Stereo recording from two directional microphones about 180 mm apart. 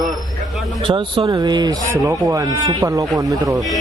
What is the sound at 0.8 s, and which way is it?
Speech, 30° right (ahead or behind).